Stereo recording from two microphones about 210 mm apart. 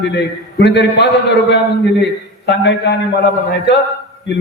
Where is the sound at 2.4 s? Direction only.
55° left (ahead or behind).